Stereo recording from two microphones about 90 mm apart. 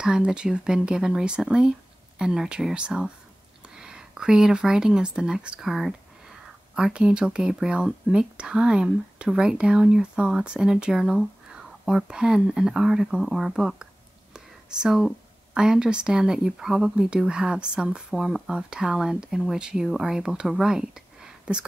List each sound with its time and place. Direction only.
0.0 s speech: 10° right (ahead or behind)